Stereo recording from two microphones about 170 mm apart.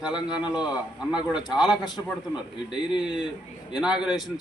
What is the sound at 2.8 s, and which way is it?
Speech, 25° left (ahead or behind).